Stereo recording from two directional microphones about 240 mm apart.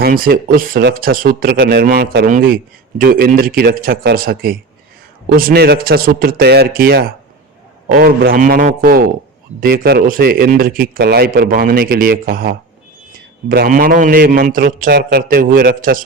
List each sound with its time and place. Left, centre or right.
0.0 s speech: right